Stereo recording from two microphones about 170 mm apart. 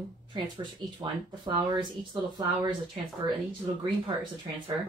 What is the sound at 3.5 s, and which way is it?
Speech, 30° right (ahead or behind).